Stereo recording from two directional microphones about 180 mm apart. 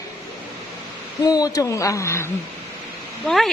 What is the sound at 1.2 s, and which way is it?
A woman's voice, 20° left (ahead or behind).